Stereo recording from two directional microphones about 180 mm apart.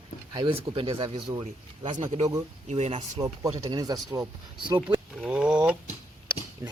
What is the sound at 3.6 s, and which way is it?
Speech, 20° right (ahead or behind).